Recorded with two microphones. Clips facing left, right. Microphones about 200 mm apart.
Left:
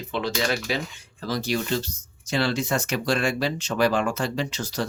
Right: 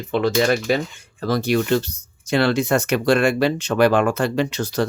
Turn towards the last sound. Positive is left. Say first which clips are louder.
# right 7 dB
turn(degrees=-60)  # may be behind; listen again after turning